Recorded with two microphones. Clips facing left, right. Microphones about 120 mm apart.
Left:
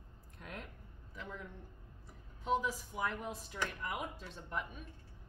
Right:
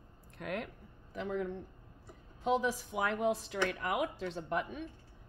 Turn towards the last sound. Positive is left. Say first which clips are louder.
# right 7 dB
turn(degrees=-90)